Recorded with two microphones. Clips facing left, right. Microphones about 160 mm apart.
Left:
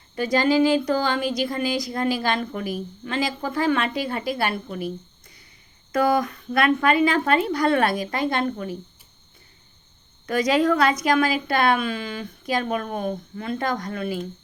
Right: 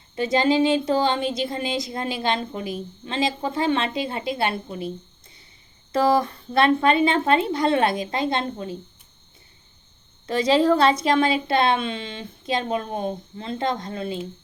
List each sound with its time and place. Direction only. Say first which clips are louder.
0.2 s a woman's voice: even; 25° right (ahead or behind)
10.2 s a woman's voice: right 1 dB; 25° right (ahead or behind)